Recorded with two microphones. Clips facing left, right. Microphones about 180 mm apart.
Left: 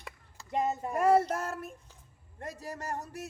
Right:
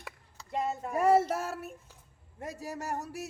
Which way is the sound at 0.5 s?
20° left (ahead or behind).